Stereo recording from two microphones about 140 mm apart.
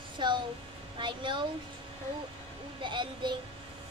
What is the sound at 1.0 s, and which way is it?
Speech, 35° right (ahead or behind).